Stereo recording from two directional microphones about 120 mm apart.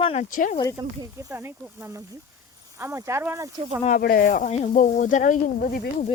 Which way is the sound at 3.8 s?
90° left.